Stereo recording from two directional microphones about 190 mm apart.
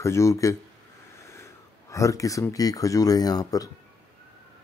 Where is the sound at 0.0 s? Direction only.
15° left (ahead or behind).